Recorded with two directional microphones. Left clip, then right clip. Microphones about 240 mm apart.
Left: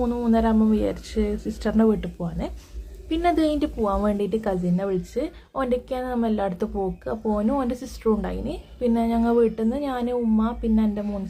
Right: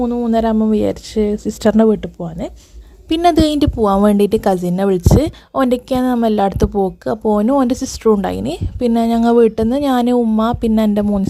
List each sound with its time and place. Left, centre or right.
0.0 s speech: right
3.1 s a woman's voice: right